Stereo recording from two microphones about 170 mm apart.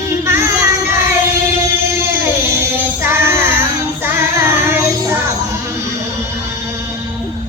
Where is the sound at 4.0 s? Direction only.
15° right (ahead or behind).